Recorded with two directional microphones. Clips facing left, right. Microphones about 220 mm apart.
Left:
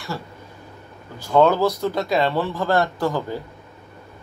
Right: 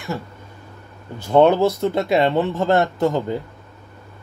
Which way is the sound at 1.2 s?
25° right (ahead or behind).